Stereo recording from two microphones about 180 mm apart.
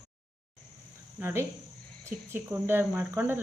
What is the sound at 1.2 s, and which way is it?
Speech, 15° right (ahead or behind).